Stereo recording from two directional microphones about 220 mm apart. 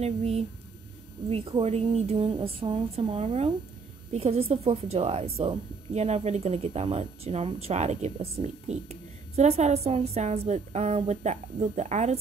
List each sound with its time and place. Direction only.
0.0 s speech: 30° right (ahead or behind)